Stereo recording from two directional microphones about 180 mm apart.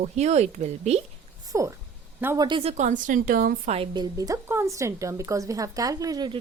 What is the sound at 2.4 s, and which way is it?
A woman's voice, 30° right (ahead or behind).